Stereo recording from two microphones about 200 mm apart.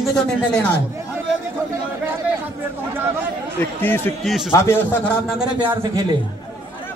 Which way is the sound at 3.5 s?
10° left (ahead or behind).